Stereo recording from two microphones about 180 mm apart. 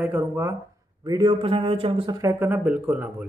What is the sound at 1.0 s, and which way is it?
A man's voice, 25° right (ahead or behind).